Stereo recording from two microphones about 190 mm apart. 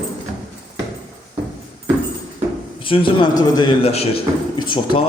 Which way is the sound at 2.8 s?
25° left (ahead or behind).